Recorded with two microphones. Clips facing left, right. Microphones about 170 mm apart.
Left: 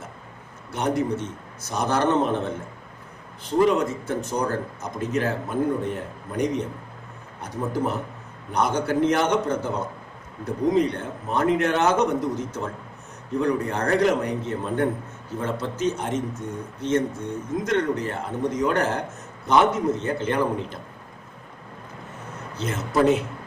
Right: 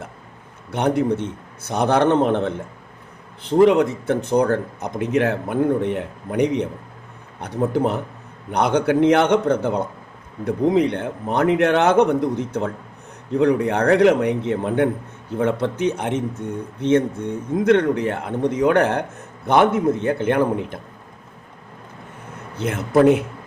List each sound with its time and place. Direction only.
0.7 s speech: 60° right (ahead or behind)
3.6 s speech: 65° right (ahead or behind)
22.5 s speech: 55° right (ahead or behind)